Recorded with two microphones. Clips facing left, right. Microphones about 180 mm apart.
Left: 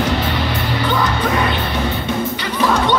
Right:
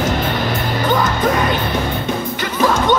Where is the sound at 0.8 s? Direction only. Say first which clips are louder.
Right 3 dB; 45° right (ahead or behind).